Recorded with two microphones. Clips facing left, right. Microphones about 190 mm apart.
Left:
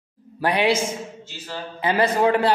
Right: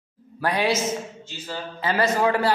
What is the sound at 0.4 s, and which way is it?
Speech, 20° left (ahead or behind).